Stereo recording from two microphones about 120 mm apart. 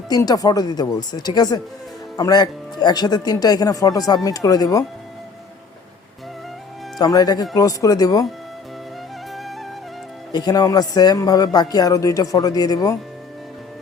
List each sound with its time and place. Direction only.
0.1 s speech: 30° left (ahead or behind)
7.0 s speech: 35° left (ahead or behind)
10.3 s speech: 35° left (ahead or behind)